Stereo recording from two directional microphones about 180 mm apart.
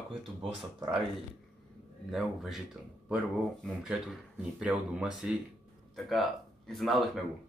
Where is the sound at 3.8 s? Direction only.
5° right (ahead or behind).